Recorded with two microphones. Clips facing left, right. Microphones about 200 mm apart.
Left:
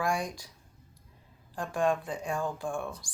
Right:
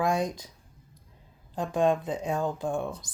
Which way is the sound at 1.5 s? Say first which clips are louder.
Right 4 dB; 20° right (ahead or behind).